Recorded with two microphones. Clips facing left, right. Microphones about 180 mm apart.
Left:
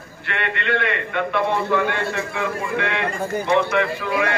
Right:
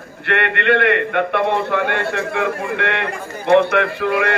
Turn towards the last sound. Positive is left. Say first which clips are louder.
# right 4 dB
turn(degrees=-60)  # may be behind; listen again after turning